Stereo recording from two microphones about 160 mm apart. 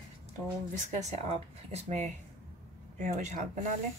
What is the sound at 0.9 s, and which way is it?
A woman's voice, 45° right (ahead or behind).